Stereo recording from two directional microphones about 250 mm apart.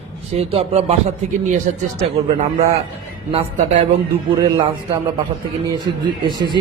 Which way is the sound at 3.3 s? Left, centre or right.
Right.